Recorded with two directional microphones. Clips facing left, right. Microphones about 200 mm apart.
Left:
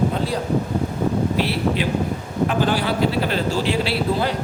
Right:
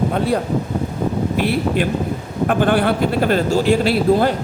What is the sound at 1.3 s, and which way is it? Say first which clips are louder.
A man's voice: right 3 dB; 50° right (ahead or behind).